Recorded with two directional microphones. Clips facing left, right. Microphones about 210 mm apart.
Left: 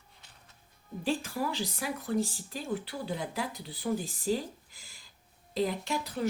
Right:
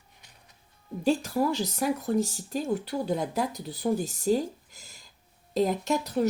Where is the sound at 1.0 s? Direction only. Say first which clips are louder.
Right 7 dB; 40° right (ahead or behind).